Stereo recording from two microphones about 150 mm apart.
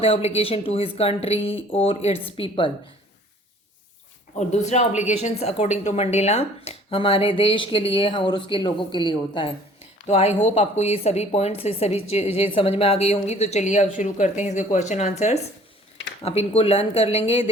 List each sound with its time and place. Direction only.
0.0 s a woman's voice: 40° left (ahead or behind)
4.4 s a woman's voice: 50° left (ahead or behind); by 9.6 s 35° left (ahead or behind)
10.1 s a woman's voice: 45° left (ahead or behind)